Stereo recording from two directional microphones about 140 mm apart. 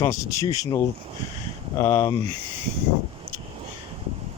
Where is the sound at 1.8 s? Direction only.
25° left (ahead or behind).